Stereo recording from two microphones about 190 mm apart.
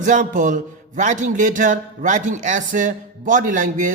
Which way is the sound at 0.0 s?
40° right (ahead or behind).